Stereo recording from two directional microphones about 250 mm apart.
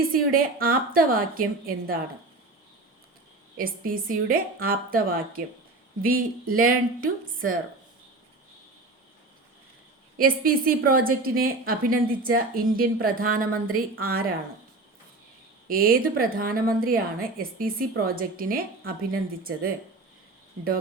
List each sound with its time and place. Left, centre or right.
0.1 s a woman's voice: right
3.6 s a woman's voice: right
10.2 s a woman's voice: right
15.6 s a woman's voice: right